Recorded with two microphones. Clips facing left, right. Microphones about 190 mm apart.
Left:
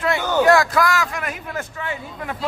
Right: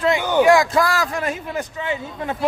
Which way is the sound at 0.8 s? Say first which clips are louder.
Right 1 dB; 35° right (ahead or behind).